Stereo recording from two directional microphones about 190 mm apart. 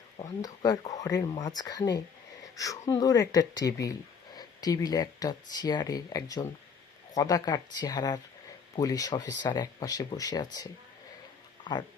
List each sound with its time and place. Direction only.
0.2 s speech: 20° left (ahead or behind)